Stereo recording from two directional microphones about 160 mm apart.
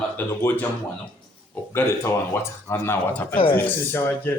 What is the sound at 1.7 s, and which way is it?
Speech, 15° left (ahead or behind).